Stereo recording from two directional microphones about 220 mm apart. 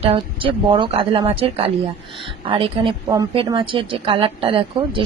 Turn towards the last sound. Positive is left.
turn(degrees=-25)  # may be behind; listen again after turning